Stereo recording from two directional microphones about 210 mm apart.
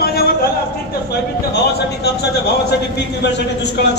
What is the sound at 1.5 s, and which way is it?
A man's voice, 50° left (ahead or behind).